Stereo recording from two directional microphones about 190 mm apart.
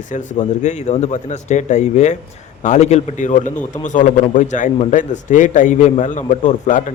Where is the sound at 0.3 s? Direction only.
35° left (ahead or behind).